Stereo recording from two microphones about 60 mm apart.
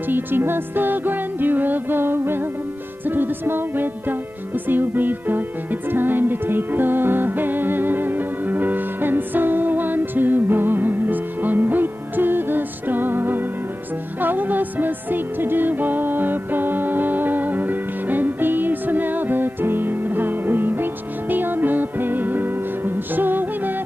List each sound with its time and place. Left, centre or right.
0.1 s music: right